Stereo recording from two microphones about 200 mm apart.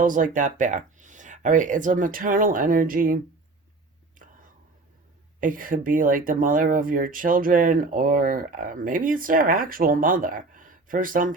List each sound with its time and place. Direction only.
0.0 s speech: 40° right (ahead or behind)
4.2 s whispering: 40° right (ahead or behind)
5.4 s speech: 45° right (ahead or behind)